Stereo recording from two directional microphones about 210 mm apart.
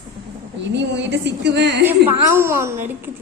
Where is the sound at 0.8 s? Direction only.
55° right (ahead or behind).